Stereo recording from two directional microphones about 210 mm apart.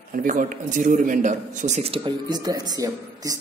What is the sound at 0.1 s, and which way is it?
A man's voice, 40° right (ahead or behind).